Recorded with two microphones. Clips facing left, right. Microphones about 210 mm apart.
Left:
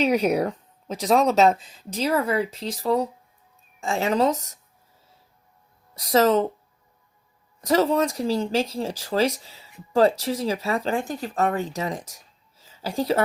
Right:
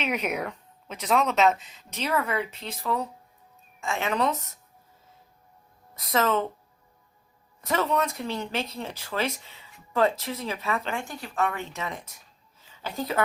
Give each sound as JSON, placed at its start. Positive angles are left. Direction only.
{"t": 0.0, "sound": "speech", "side_deg": 35}
{"t": 5.9, "sound": "speech", "side_deg": 35}
{"t": 7.7, "sound": "a woman's voice", "side_deg": 35}